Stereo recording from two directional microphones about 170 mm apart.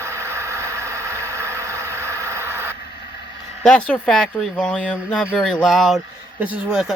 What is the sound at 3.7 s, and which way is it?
Speech, 5° left (ahead or behind).